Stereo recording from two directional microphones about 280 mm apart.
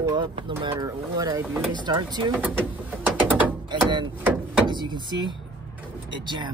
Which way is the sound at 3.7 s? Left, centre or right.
Centre.